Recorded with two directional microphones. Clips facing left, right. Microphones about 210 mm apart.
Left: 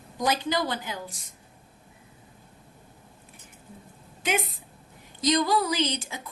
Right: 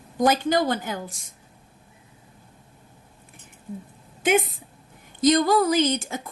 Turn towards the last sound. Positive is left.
turn(degrees=-50)  # may be behind; listen again after turning